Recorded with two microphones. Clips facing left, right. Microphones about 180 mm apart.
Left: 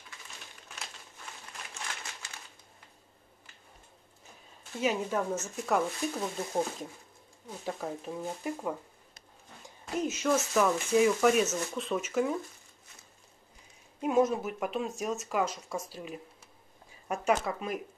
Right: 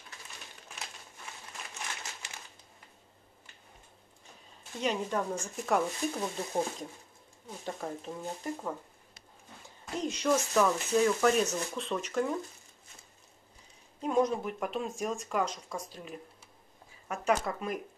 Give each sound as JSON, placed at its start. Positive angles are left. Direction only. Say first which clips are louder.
{"t": 4.7, "sound": "speech", "louder": "left 2 dB", "side_deg": 5}
{"t": 9.9, "sound": "speech", "louder": "left 1 dB", "side_deg": 5}
{"t": 14.0, "sound": "speech", "louder": "left 2 dB", "side_deg": 5}
{"t": 17.1, "sound": "speech", "louder": "left 1 dB", "side_deg": 15}
{"t": 17.5, "sound": "speech", "louder": "even", "side_deg": 5}